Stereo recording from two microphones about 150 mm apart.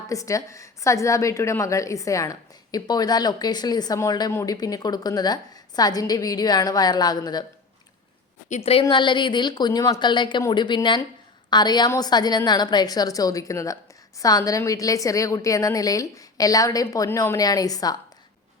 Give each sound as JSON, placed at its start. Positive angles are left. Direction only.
{"t": 0.1, "sound": "a woman's voice", "side_deg": 20}
{"t": 8.4, "sound": "a woman's voice", "side_deg": 45}
{"t": 8.8, "sound": "a woman's voice", "side_deg": 30}